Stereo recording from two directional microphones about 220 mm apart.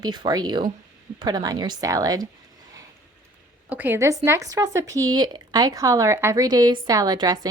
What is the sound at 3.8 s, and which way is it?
A woman's voice, 10° right (ahead or behind).